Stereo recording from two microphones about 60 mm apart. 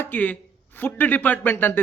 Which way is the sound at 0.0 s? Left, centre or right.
Left.